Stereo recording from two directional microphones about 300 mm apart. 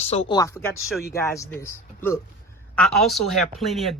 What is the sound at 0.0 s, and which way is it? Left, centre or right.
Speech, left.